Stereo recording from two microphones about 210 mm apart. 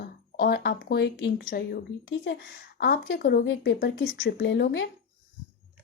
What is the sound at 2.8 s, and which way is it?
Speech, 45° left (ahead or behind).